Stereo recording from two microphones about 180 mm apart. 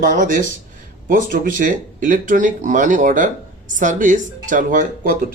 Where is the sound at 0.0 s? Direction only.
50° right (ahead or behind).